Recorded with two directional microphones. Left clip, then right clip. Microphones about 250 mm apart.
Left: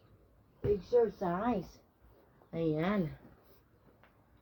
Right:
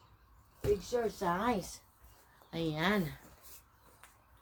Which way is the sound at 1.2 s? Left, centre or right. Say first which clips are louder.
Right 1 dB; centre.